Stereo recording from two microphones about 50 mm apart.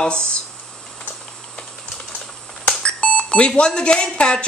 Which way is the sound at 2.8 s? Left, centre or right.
Centre.